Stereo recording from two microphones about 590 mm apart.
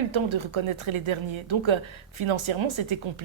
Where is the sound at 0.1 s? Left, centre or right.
Right.